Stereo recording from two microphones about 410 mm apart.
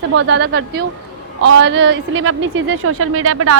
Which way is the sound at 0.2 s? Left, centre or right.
Right.